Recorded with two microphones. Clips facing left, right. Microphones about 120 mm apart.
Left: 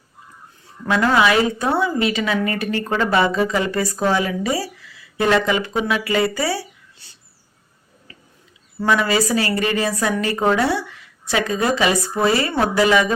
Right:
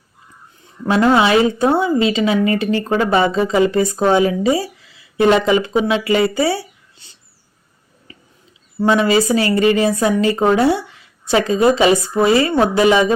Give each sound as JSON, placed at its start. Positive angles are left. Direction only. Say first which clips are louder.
{"t": 0.9, "sound": "speech", "louder": "right 3 dB", "side_deg": -25}
{"t": 6.3, "sound": "a sound", "louder": "right 5 dB", "side_deg": -25}
{"t": 8.8, "sound": "speech", "louder": "right 4 dB", "side_deg": -25}